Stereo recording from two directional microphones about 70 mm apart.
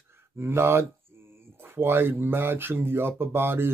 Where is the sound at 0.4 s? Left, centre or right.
Right.